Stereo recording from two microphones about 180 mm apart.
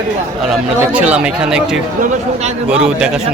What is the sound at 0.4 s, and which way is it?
Speech, 5° right (ahead or behind).